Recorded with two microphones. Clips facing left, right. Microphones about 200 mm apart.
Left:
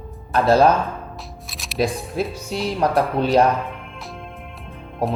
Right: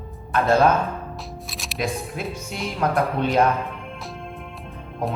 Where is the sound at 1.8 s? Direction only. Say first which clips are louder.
Left 5 dB; 35° left (ahead or behind).